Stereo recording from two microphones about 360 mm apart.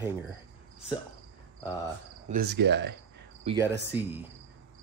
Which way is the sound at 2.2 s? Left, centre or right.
Right.